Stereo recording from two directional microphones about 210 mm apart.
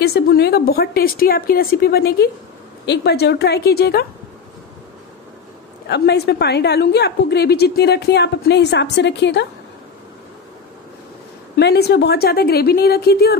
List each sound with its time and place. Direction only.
0.0 s a woman's voice: 50° left (ahead or behind)
5.9 s a woman's voice: 55° left (ahead or behind)
11.5 s a woman's voice: 50° left (ahead or behind)